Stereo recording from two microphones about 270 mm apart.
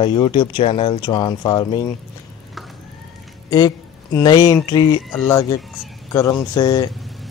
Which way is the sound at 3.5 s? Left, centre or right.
Centre.